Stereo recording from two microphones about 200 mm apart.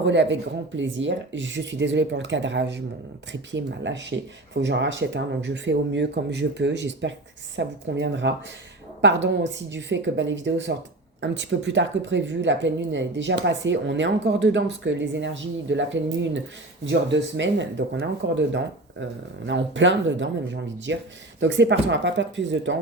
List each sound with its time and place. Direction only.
0.0 s speech: 65° right (ahead or behind)